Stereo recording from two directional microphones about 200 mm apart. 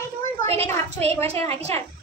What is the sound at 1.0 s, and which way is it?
Speech, 30° right (ahead or behind).